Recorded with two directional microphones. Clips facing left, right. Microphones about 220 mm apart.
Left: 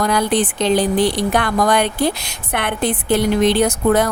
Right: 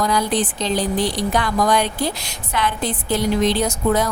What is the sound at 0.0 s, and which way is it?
A woman's voice, 60° left (ahead or behind).